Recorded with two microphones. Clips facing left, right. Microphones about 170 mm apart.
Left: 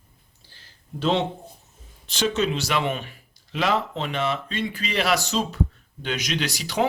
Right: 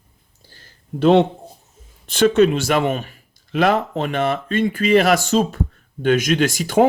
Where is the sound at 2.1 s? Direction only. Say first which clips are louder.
Right 10 dB; 55° right (ahead or behind).